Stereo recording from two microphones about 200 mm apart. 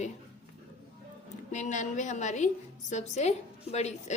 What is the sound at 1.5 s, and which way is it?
A woman's voice, 35° left (ahead or behind).